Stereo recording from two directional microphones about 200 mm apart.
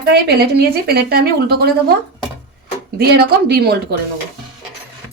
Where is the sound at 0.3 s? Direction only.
50° right (ahead or behind).